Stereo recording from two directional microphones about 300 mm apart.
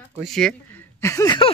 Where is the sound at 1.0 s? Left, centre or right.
Centre.